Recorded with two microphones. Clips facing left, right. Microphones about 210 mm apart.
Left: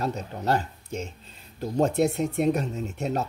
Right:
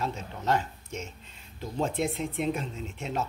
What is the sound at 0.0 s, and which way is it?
Speech, 40° left (ahead or behind).